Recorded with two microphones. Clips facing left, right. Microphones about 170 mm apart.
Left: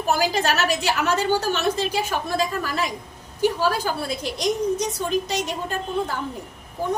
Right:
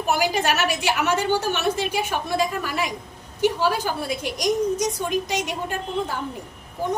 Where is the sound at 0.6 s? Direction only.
35° left (ahead or behind).